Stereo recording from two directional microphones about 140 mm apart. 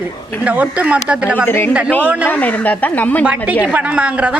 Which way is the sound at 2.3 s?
10° left (ahead or behind).